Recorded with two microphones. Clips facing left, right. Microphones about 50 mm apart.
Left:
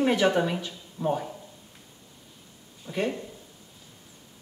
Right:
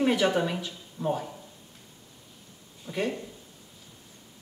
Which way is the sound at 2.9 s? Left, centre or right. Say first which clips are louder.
Left 1 dB; left.